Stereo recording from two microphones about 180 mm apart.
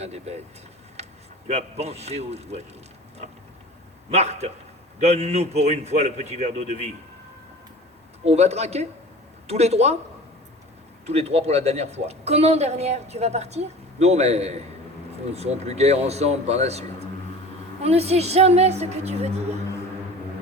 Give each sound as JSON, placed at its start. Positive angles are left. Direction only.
{"t": 0.0, "sound": "a woman's voice", "side_deg": -35}
{"t": 1.0, "sound": "a sound", "side_deg": -35}
{"t": 1.5, "sound": "a woman's voice", "side_deg": -35}
{"t": 4.1, "sound": "a woman's voice", "side_deg": -35}
{"t": 8.2, "sound": "a woman's voice", "side_deg": -35}
{"t": 11.0, "sound": "a woman's voice", "side_deg": -35}
{"t": 17.8, "sound": "a woman's voice", "side_deg": -35}